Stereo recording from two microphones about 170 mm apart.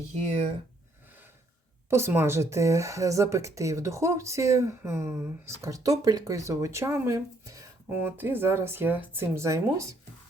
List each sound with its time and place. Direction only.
0.1 s speech: 40° right (ahead or behind)
1.9 s speech: 15° right (ahead or behind)